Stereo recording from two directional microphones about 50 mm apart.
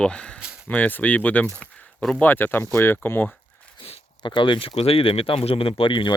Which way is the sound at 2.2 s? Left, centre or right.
Left.